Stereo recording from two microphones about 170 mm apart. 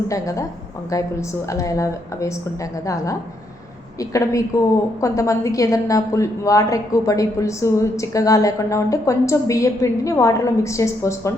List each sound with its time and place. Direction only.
0.1 s speech: 20° left (ahead or behind)
1.5 s a woman's voice: 20° left (ahead or behind)